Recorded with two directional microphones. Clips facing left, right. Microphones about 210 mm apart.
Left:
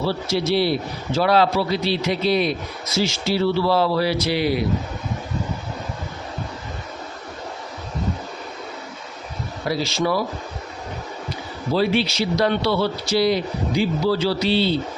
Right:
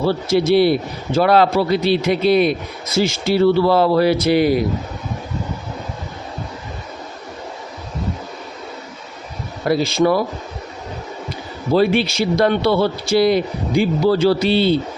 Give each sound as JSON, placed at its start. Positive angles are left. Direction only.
{"t": 0.0, "sound": "a man's voice", "side_deg": -55}
{"t": 9.6, "sound": "a man's voice", "side_deg": -55}
{"t": 11.7, "sound": "a man's voice", "side_deg": -55}